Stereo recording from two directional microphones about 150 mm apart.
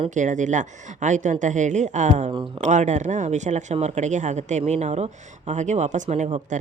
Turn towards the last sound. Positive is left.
turn(degrees=-55)  # may be behind; listen again after turning